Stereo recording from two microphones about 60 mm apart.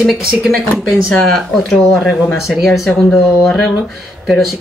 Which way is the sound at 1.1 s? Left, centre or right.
Centre.